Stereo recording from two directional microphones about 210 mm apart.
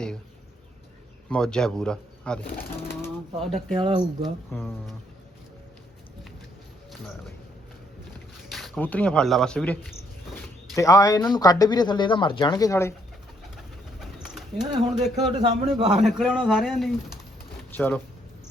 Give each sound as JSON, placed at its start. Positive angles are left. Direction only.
{"t": 1.3, "sound": "speech", "side_deg": 5}
{"t": 3.8, "sound": "speech", "side_deg": -20}
{"t": 8.4, "sound": "speech", "side_deg": 0}
{"t": 10.8, "sound": "speech", "side_deg": 15}
{"t": 14.0, "sound": "bird", "side_deg": 0}
{"t": 15.7, "sound": "speech", "side_deg": 0}
{"t": 17.7, "sound": "speech", "side_deg": 10}